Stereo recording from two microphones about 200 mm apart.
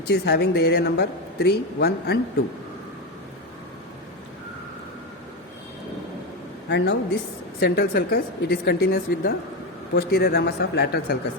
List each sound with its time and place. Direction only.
0.1 s a woman's voice: 55° left (ahead or behind)
6.7 s a woman's voice: 60° left (ahead or behind)